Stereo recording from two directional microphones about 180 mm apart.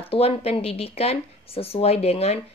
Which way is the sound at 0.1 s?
35° left (ahead or behind).